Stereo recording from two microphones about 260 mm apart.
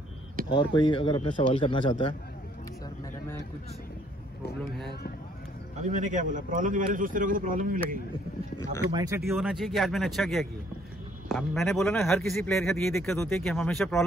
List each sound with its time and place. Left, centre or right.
0.6 s a man's voice: centre
5.8 s a man's voice: right
8.9 s speech: centre
9.2 s speech: centre